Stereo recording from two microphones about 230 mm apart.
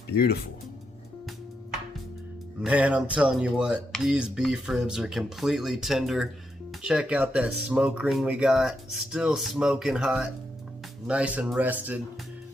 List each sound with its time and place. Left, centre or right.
0.2 s speech: left
2.6 s speech: centre